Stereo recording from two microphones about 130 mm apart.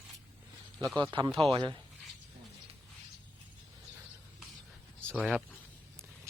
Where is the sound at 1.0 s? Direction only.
35° right (ahead or behind).